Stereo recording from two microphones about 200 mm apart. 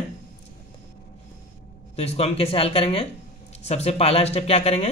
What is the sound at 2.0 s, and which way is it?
Speech, 30° left (ahead or behind).